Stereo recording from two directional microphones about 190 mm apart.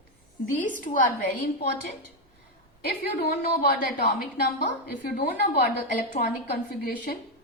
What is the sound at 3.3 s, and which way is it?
A woman's voice, 55° left (ahead or behind).